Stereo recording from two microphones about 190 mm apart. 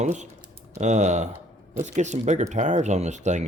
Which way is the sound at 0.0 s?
40° right (ahead or behind).